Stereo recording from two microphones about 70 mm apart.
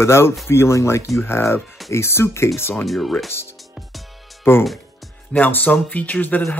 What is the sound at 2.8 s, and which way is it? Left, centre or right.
Speech, centre.